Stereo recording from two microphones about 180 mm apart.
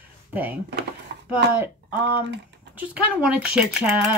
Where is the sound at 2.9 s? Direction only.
5° right (ahead or behind).